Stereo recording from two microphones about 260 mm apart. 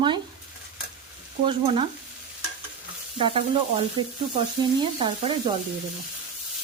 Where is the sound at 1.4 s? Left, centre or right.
Right.